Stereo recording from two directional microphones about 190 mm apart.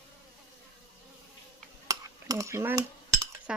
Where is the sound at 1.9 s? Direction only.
15° right (ahead or behind).